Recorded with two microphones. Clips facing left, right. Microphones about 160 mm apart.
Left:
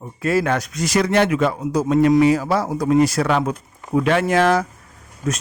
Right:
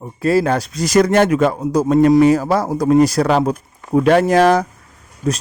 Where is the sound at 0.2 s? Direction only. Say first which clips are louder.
Right 4 dB; 35° right (ahead or behind).